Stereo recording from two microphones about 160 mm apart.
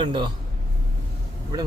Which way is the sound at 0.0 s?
30° right (ahead or behind).